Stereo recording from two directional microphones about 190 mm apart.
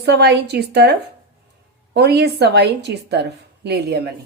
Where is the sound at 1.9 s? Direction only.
60° right (ahead or behind).